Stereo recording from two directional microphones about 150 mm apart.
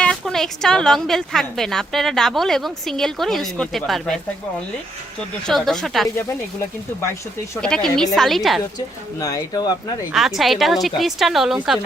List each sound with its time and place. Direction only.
0.0 s speech: 5° left (ahead or behind)
5.5 s speech: centre (ahead or behind)
7.6 s speech: 5° left (ahead or behind)
9.2 s speech: 25° left (ahead or behind)
10.1 s speech: centre (ahead or behind)